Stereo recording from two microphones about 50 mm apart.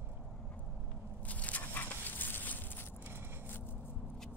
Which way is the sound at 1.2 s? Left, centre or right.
Left.